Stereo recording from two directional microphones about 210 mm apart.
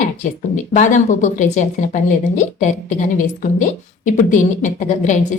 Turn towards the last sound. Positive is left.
turn(degrees=35)  # may be behind; listen again after turning